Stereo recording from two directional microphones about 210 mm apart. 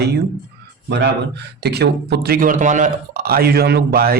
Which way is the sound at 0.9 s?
55° right (ahead or behind).